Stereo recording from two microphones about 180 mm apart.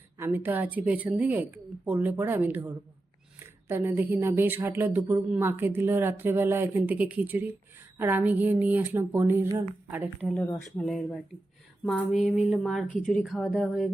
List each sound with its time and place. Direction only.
0.2 s speech: 10° right (ahead or behind)
10.2 s speech: 5° left (ahead or behind)
11.9 s a sound: 10° left (ahead or behind)
12.1 s speech: centre (ahead or behind)